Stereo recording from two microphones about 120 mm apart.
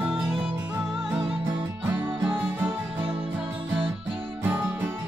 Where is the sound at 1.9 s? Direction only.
15° right (ahead or behind).